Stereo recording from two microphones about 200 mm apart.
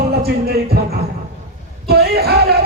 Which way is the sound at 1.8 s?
50° right (ahead or behind).